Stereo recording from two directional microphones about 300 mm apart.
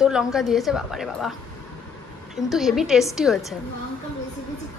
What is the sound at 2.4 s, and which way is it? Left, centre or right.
A woman's voice, centre.